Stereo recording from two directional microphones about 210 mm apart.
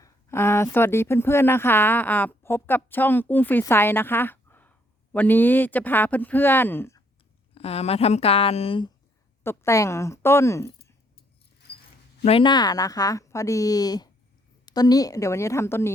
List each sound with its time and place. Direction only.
0.0 s speech: 10° left (ahead or behind)
7.5 s speech: 30° left (ahead or behind)
9.4 s a woman's voice: 10° left (ahead or behind)
12.2 s speech: 25° left (ahead or behind)